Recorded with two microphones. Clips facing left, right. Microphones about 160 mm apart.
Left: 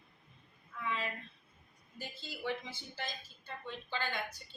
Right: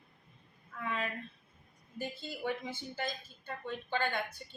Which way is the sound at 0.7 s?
50° right (ahead or behind).